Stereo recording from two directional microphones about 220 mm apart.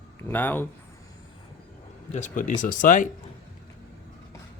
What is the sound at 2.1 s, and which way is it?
Speech, 35° left (ahead or behind).